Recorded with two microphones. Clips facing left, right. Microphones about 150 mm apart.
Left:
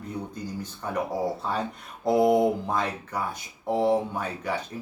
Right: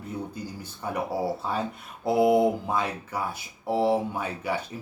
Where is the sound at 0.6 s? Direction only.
10° right (ahead or behind).